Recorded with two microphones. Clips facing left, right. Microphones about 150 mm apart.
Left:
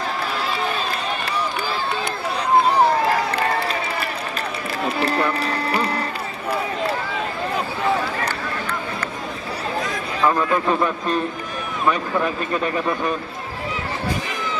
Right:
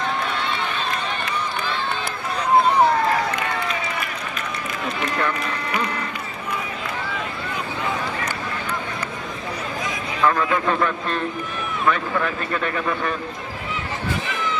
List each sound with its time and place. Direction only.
3.3 s run: 35° left (ahead or behind)
4.8 s music: 35° left (ahead or behind)
10.2 s a man's voice: 15° left (ahead or behind)